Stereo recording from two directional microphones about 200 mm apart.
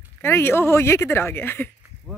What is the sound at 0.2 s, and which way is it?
Speech, 10° left (ahead or behind).